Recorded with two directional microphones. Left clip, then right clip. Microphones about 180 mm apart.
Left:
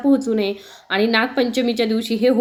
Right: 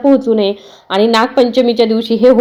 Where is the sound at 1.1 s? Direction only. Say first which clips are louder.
Right 9 dB; 20° left (ahead or behind).